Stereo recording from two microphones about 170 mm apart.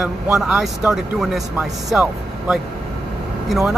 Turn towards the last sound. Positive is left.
turn(degrees=0)  # may be behind; listen again after turning